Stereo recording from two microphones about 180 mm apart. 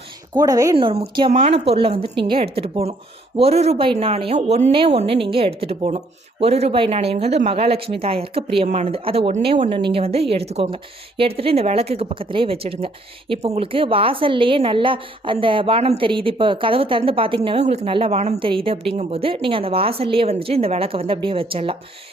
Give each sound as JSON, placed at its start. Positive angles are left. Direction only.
{"t": 0.3, "sound": "speech", "side_deg": -20}
{"t": 1.3, "sound": "speech", "side_deg": -40}